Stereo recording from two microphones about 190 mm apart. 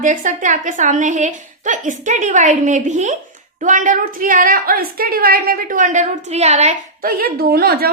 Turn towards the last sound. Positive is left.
turn(degrees=-55)  # may be behind; listen again after turning